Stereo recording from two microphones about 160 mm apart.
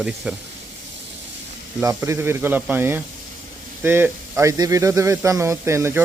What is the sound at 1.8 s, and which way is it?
Speech, 15° right (ahead or behind).